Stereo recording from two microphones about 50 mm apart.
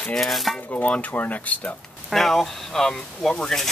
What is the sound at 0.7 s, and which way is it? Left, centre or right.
Speech, left.